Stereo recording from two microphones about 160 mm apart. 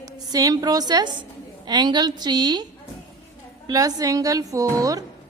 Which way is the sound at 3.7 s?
20° right (ahead or behind).